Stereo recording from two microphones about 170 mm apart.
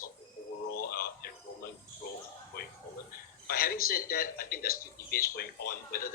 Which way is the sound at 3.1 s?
60° left (ahead or behind).